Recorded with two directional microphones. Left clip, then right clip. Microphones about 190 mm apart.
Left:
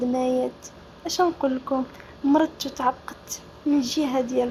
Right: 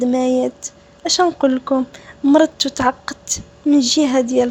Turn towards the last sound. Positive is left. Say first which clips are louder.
# right 9 dB
turn(degrees=-55)  # may be behind; listen again after turning